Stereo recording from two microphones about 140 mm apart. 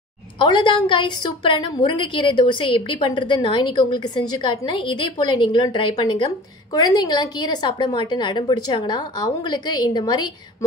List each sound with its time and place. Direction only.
0.4 s a woman's voice: 35° left (ahead or behind)